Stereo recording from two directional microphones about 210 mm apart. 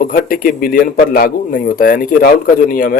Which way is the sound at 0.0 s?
40° left (ahead or behind).